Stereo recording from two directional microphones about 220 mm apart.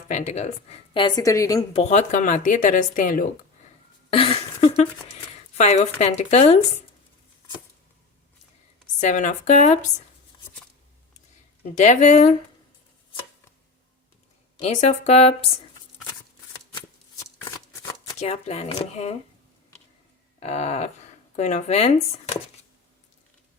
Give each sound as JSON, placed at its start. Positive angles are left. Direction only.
{"t": 0.1, "sound": "speech", "side_deg": 35}
{"t": 0.9, "sound": "a woman's voice", "side_deg": 20}
{"t": 1.8, "sound": "speech", "side_deg": 30}
{"t": 4.1, "sound": "speech", "side_deg": 25}
{"t": 9.0, "sound": "speech", "side_deg": 35}
{"t": 11.6, "sound": "speech", "side_deg": 35}
{"t": 14.5, "sound": "speech", "side_deg": 30}
{"t": 16.0, "sound": "shuffling cards", "side_deg": 20}
{"t": 18.2, "sound": "speech", "side_deg": 30}
{"t": 20.4, "sound": "speech", "side_deg": 30}